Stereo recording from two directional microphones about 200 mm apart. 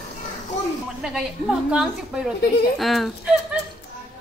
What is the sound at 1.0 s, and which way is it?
A woman's voice, centre (ahead or behind).